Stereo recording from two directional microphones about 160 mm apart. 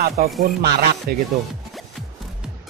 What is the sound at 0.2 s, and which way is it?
Music, 65° right (ahead or behind).